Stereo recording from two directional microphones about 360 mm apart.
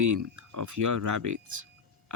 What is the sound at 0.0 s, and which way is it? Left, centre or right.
Speech, right.